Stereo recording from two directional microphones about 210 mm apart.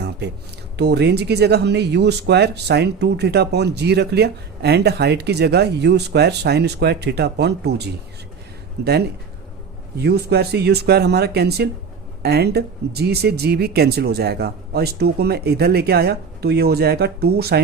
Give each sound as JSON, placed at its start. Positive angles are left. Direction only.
{"t": 0.8, "sound": "speech", "side_deg": -50}